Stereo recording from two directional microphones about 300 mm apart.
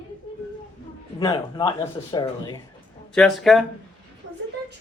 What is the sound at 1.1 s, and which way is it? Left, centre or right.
A man's voice, centre.